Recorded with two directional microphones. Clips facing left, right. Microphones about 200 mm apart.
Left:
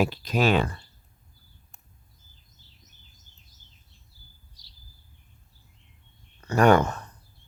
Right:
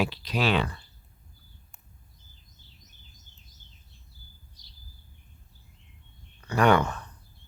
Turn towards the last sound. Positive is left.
turn(degrees=45)  # may be behind; listen again after turning